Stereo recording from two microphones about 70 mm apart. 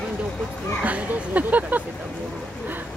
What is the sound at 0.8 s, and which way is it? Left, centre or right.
Speech, right.